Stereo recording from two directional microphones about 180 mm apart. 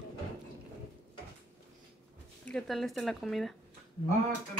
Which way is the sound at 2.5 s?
Centre (ahead or behind).